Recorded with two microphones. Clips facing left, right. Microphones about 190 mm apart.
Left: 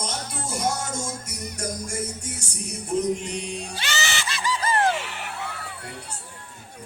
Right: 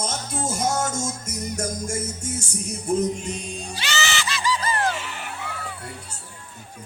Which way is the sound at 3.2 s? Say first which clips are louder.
Left 1 dB; 75° left (ahead or behind).